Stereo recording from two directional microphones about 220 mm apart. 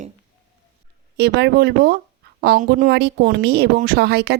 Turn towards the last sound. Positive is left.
turn(degrees=-50)  # may be behind; listen again after turning